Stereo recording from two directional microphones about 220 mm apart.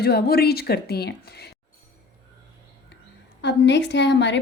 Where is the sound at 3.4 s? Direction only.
50° left (ahead or behind).